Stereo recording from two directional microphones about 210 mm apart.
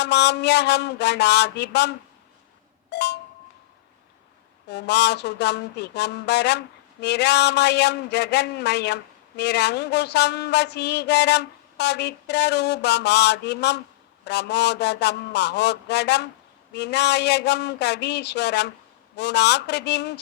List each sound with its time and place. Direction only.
0.0 s a man's voice: 55° left (ahead or behind)
2.9 s a sound: 55° left (ahead or behind)
4.7 s a man's voice: 55° left (ahead or behind)